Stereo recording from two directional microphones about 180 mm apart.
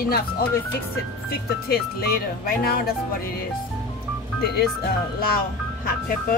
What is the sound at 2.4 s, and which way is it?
Speech, 55° left (ahead or behind).